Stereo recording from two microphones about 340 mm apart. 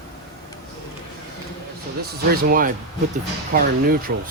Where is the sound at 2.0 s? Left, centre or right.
Right.